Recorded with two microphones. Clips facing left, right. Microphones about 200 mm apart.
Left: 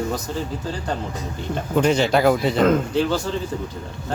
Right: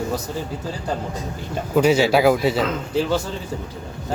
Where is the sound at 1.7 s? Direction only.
5° right (ahead or behind).